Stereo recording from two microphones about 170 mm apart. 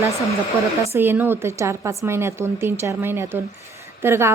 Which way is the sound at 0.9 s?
10° right (ahead or behind).